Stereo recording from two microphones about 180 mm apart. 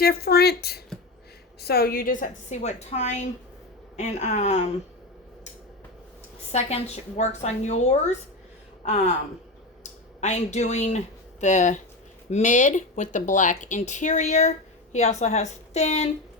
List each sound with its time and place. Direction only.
0.0 s a woman's voice: 60° left (ahead or behind); by 4.7 s 35° left (ahead or behind)
6.5 s a woman's voice: 35° left (ahead or behind)
10.2 s a woman's voice: 40° left (ahead or behind)